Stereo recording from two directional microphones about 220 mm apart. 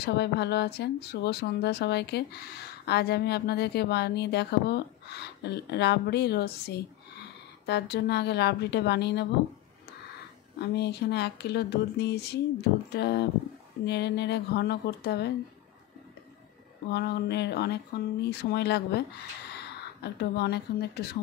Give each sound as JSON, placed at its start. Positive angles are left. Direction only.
{"t": 0.0, "sound": "speech", "side_deg": 50}
{"t": 10.6, "sound": "speech", "side_deg": 50}
{"t": 16.9, "sound": "speech", "side_deg": 45}